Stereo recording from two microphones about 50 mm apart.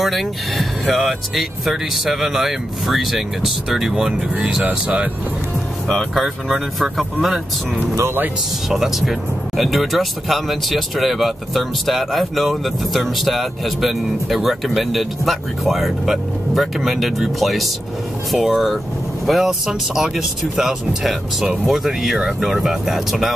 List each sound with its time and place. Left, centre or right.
0.0 s speech: centre
3.9 s speech: centre
6.1 s speech: centre